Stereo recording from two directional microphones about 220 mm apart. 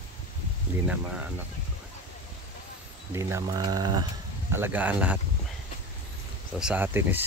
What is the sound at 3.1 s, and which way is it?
Speech, 15° right (ahead or behind).